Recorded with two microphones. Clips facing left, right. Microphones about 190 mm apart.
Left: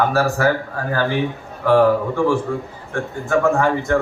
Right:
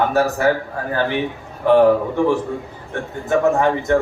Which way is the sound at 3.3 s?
20° right (ahead or behind).